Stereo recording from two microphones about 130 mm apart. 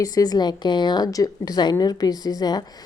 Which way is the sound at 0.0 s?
30° left (ahead or behind).